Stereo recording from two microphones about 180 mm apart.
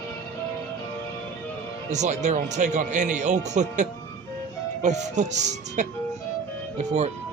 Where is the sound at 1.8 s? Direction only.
40° right (ahead or behind).